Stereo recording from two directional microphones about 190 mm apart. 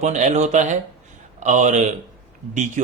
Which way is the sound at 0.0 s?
40° right (ahead or behind).